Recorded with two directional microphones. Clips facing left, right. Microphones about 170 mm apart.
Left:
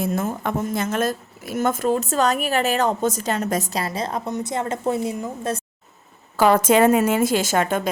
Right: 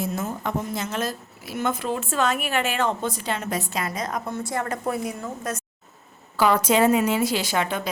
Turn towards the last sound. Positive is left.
turn(degrees=45)  # may be behind; listen again after turning